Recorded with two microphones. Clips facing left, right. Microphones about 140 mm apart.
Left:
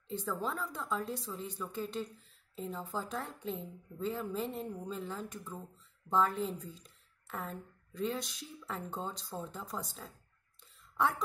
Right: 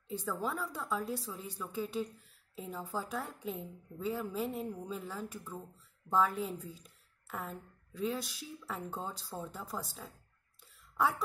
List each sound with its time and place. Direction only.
0.1 s a woman's voice: 10° right (ahead or behind)